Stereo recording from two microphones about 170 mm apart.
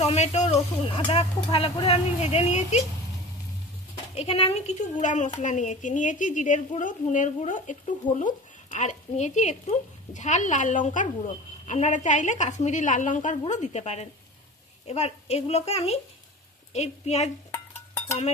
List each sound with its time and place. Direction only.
0.0 s speech: 40° left (ahead or behind)
4.1 s speech: 35° left (ahead or behind)